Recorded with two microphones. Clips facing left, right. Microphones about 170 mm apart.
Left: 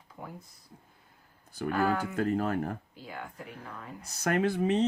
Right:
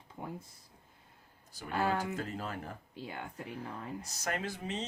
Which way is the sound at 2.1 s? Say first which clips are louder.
Left 10 dB; 55° left (ahead or behind).